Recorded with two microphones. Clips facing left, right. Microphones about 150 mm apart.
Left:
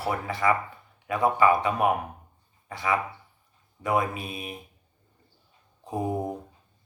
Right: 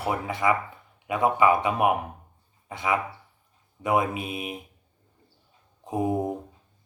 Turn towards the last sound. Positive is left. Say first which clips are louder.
# right 3 dB
turn(degrees=-20)  # may be behind; listen again after turning